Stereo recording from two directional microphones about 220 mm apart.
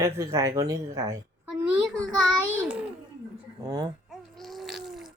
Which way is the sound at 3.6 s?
15° right (ahead or behind).